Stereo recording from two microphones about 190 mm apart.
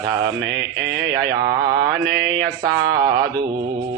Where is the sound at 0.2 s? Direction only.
65° right (ahead or behind).